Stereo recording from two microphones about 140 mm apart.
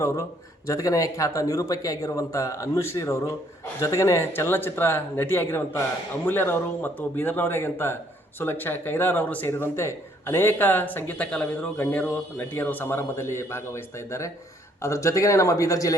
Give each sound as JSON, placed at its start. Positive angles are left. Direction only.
{"t": 0.7, "sound": "speech", "side_deg": 25}